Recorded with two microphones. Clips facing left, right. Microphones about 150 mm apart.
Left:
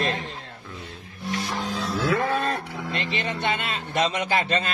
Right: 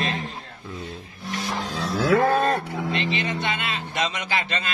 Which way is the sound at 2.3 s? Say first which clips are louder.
Right 4 dB; 40° right (ahead or behind).